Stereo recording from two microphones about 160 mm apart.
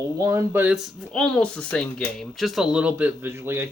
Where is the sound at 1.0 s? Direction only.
5° left (ahead or behind); by 3.7 s 15° right (ahead or behind).